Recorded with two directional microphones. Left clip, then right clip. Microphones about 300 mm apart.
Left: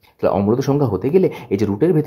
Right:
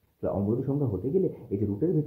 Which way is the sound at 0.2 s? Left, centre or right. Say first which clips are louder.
Left 12 dB; left.